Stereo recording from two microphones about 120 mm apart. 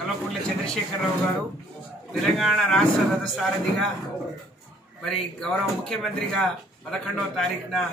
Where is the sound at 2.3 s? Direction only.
Centre (ahead or behind).